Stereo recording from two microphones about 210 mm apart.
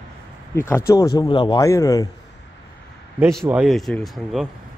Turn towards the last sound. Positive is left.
turn(degrees=0)  # may be behind; listen again after turning